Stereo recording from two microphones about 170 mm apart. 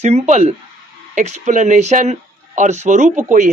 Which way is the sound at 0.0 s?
40° right (ahead or behind).